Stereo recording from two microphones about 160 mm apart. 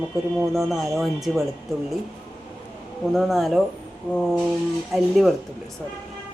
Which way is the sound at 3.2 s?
Centre (ahead or behind).